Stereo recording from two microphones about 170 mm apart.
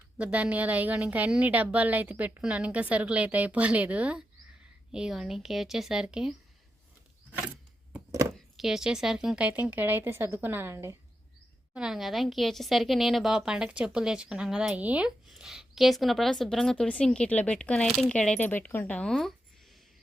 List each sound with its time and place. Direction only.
0.2 s a woman's voice: 5° right (ahead or behind)
7.9 s a sound: 15° right (ahead or behind)
8.5 s a woman's voice: centre (ahead or behind)
11.7 s a woman's voice: 5° right (ahead or behind)